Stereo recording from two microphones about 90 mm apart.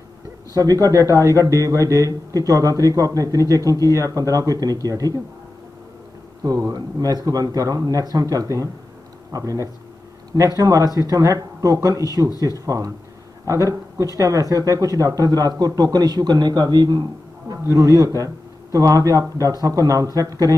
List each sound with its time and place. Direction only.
0.5 s a man's voice: 45° right (ahead or behind)
6.4 s a man's voice: 45° right (ahead or behind)
17.5 s a man's voice: 40° right (ahead or behind)